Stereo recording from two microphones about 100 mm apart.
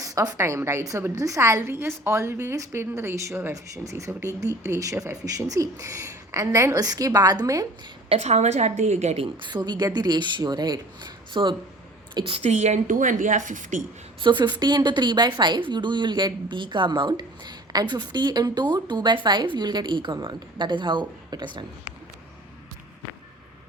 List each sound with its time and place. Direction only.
0.0 s a woman's voice: 35° right (ahead or behind)
8.1 s a woman's voice: 90° right; by 9.5 s 70° right (ahead or behind)
9.5 s a woman's voice: 45° right (ahead or behind)
12.2 s a woman's voice: 80° right
14.2 s a woman's voice: 50° right (ahead or behind)